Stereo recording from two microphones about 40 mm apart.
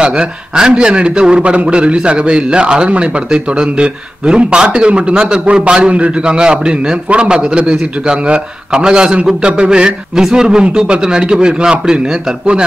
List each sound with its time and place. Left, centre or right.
0.0 s a man's voice: right